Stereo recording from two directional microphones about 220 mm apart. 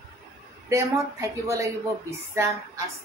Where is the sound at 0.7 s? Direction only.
15° right (ahead or behind).